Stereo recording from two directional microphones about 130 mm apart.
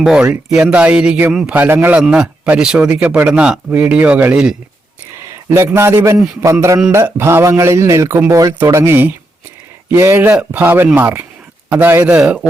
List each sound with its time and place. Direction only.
0.0 s a man's voice: 5° right (ahead or behind)
5.1 s a man's voice: 20° right (ahead or behind)